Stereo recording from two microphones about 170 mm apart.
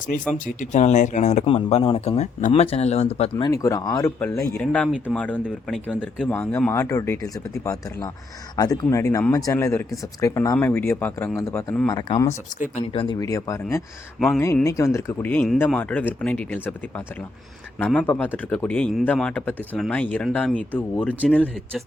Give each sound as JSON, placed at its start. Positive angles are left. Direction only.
{"t": 0.3, "sound": "speech", "side_deg": 50}
{"t": 11.9, "sound": "speech", "side_deg": 25}
{"t": 12.5, "sound": "speech", "side_deg": 50}
{"t": 12.8, "sound": "speech", "side_deg": 30}
{"t": 17.7, "sound": "speech", "side_deg": 5}